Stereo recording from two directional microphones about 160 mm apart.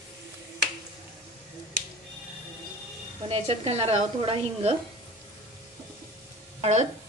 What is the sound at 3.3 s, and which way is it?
A woman's voice, 40° right (ahead or behind).